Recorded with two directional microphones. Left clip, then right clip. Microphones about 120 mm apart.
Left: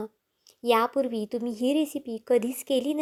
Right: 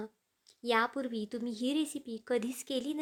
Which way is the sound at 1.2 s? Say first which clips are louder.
Left 9 dB; 10° left (ahead or behind).